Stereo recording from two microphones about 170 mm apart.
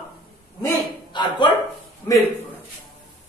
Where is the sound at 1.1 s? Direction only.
25° left (ahead or behind).